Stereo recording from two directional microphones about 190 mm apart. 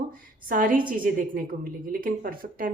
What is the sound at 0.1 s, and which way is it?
A woman's voice, 45° right (ahead or behind).